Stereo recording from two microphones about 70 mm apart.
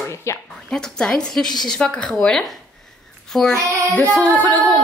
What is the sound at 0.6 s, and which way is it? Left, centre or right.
A woman's voice, centre.